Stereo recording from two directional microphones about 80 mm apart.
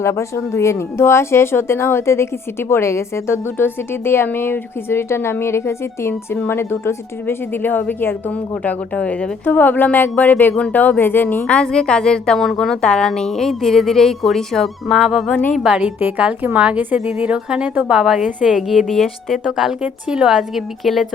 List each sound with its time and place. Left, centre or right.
0.0 s a woman's voice: left
11.4 s a woman's voice: centre
15.3 s a woman's voice: left
15.5 s a woman's voice: centre
15.8 s a woman's voice: right
18.3 s a woman's voice: centre
18.5 s a woman's voice: centre